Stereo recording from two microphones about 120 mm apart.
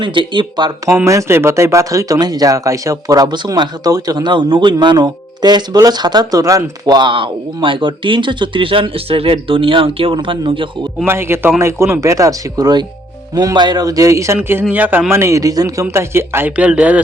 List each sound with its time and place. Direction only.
0.0 s speech: 40° right (ahead or behind)
1.0 s speech: 25° right (ahead or behind); by 10.7 s 45° right (ahead or behind)
11.0 s a man's voice: 20° right (ahead or behind)